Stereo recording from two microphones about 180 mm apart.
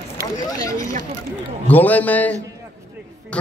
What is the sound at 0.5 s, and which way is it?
Speech, 20° left (ahead or behind).